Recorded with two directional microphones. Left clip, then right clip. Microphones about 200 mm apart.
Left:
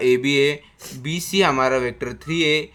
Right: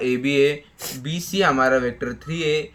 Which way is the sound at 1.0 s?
55° left (ahead or behind).